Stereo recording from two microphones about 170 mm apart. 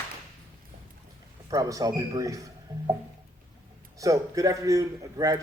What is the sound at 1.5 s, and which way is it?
Speech, 20° right (ahead or behind).